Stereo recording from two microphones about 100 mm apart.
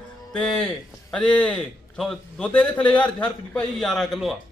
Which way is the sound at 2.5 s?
15° left (ahead or behind).